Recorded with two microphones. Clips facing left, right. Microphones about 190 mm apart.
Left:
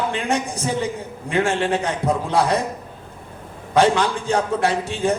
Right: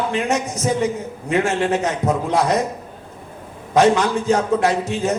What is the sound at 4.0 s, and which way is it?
A man's voice, 30° left (ahead or behind).